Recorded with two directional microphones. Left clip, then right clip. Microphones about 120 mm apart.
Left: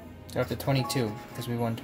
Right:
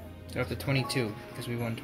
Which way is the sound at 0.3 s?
55° left (ahead or behind).